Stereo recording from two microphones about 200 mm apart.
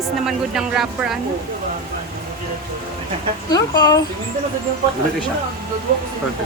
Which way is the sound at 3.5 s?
20° left (ahead or behind).